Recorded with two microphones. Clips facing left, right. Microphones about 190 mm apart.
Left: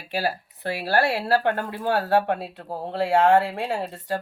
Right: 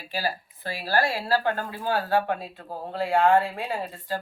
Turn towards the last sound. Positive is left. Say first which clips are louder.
# left 3 dB
turn(degrees=75)  # may be behind; listen again after turning